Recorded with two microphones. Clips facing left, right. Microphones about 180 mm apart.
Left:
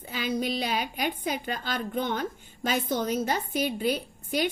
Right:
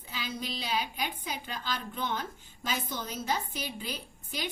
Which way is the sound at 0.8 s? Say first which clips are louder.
Left 5 dB; 55° left (ahead or behind).